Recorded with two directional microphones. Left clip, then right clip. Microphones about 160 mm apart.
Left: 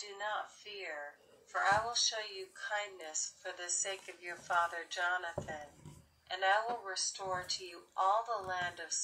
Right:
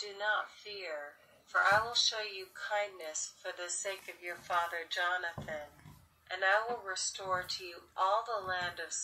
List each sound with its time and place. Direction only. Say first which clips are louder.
0.2 s a woman's voice: right 5 dB; 10° right (ahead or behind)